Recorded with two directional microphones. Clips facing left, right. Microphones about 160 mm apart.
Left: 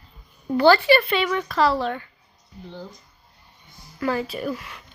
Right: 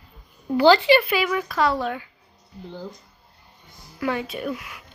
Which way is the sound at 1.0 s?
5° right (ahead or behind).